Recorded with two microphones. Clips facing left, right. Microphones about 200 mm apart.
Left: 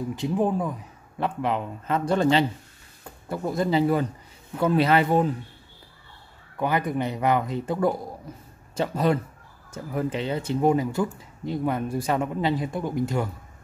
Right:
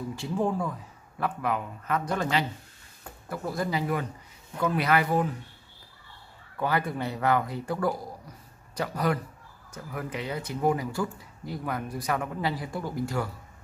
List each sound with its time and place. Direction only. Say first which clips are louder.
0.1 s speech: left 4 dB; 20° left (ahead or behind)
6.6 s speech: left 3 dB; 20° left (ahead or behind)